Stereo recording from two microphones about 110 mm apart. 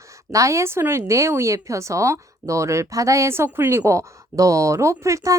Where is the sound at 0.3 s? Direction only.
30° right (ahead or behind).